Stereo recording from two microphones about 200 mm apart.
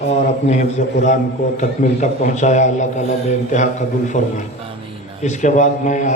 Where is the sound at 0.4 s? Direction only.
35° left (ahead or behind).